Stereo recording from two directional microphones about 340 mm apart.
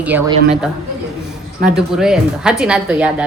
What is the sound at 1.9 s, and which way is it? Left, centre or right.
Speech, centre.